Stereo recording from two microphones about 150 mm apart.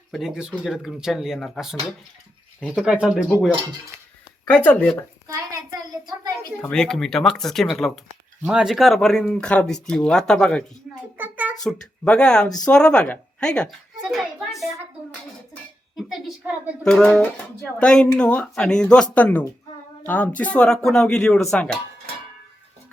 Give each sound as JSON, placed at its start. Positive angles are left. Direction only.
{"t": 0.1, "sound": "a child's voice", "side_deg": -5}
{"t": 4.5, "sound": "speech", "side_deg": 10}
{"t": 5.3, "sound": "a child's voice", "side_deg": -25}
{"t": 6.6, "sound": "a child's voice", "side_deg": 5}
{"t": 11.2, "sound": "a sound", "side_deg": -10}
{"t": 11.6, "sound": "a child's voice", "side_deg": 5}